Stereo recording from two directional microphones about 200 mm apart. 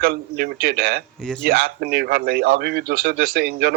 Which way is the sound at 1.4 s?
50° right (ahead or behind).